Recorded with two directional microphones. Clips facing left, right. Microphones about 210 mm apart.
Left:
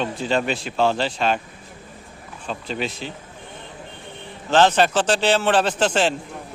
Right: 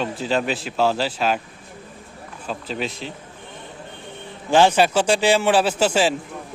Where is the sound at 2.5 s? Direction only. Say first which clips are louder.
Even; centre (ahead or behind).